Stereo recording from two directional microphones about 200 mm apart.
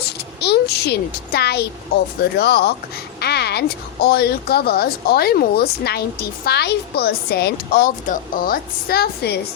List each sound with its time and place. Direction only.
0.3 s a child's voice: 55° left (ahead or behind)